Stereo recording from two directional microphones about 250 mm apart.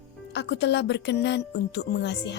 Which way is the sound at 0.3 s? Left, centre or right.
Left.